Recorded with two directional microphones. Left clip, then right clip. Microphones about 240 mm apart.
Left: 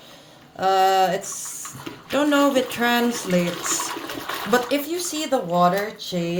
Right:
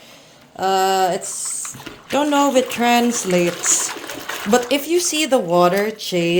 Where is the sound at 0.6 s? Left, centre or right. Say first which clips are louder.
Right 1 dB; centre.